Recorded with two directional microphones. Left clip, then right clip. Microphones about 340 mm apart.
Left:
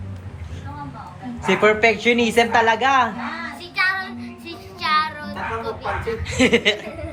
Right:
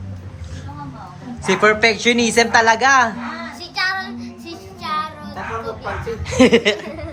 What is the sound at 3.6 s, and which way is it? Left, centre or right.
Child singing, right.